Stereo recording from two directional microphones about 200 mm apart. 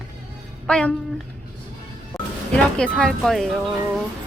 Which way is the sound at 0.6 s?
5° left (ahead or behind).